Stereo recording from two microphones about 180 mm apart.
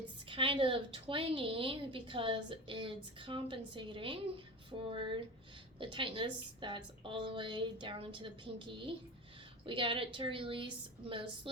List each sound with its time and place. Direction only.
0.3 s a woman's voice: 30° right (ahead or behind)